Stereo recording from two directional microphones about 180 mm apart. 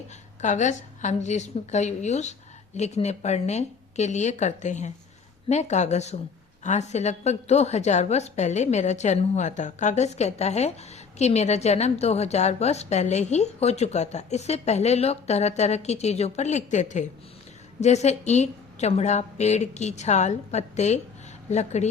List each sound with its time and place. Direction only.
0.4 s a woman's voice: 40° left (ahead or behind)